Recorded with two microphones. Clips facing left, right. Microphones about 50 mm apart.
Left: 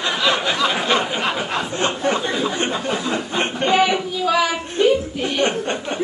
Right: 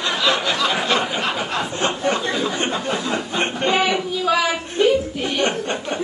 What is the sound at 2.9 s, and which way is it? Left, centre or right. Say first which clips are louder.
Chuckle: left 1 dB; centre.